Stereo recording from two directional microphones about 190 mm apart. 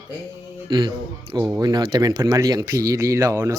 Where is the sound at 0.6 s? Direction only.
20° right (ahead or behind).